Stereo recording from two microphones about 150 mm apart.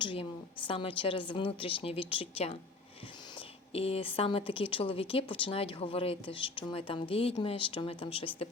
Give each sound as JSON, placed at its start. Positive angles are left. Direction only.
{"t": 0.0, "sound": "a woman's voice", "side_deg": 35}